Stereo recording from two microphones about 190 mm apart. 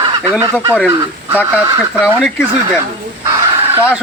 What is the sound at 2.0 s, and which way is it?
Speech, centre (ahead or behind).